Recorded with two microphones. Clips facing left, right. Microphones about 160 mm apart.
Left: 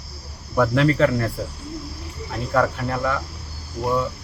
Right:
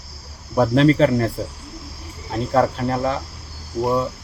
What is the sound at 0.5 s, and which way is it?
Speech, 30° right (ahead or behind).